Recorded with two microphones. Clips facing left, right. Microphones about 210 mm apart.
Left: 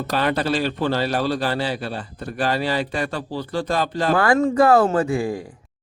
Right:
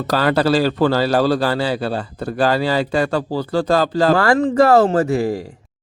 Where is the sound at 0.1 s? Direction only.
90° right.